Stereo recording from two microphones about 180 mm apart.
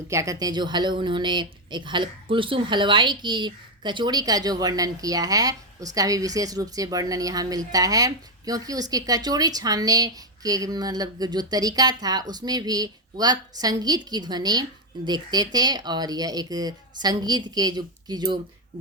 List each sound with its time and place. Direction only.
0.1 s a woman's voice: 15° right (ahead or behind)